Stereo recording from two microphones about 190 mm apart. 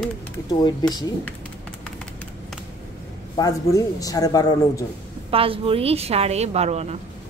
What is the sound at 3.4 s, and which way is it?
Speech, 20° left (ahead or behind).